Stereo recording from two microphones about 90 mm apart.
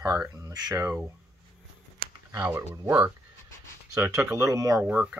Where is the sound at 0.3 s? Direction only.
40° right (ahead or behind).